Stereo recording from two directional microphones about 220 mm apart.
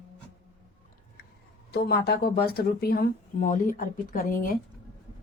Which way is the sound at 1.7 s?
45° left (ahead or behind).